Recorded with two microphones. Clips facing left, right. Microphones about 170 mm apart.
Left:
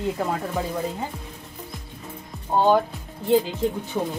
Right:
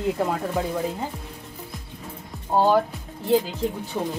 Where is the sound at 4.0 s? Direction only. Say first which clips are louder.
Even; 5° left (ahead or behind).